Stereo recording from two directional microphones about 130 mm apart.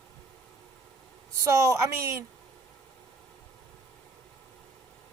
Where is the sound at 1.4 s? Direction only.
25° right (ahead or behind).